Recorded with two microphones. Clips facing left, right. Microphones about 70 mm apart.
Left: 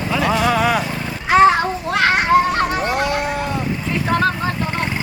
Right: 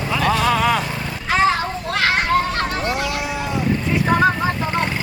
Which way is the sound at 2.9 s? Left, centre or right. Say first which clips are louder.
Left 3 dB; left.